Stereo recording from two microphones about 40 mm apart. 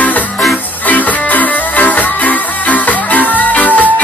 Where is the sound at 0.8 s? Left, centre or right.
Left.